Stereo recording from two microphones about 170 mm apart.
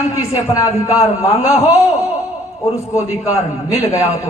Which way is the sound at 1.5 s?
35° left (ahead or behind).